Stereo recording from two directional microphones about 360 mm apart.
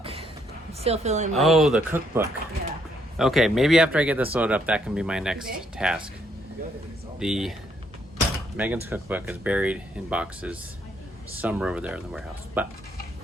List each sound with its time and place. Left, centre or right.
0.0 s music: centre
0.7 s a woman's voice: centre
1.3 s speech: centre
7.2 s speech: centre
8.5 s speech: centre